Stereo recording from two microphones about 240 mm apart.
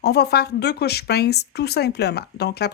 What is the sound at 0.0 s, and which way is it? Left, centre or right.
Speech, left.